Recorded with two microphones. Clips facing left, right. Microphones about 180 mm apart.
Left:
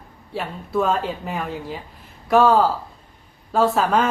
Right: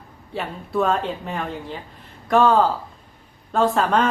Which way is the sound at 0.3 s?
Centre (ahead or behind).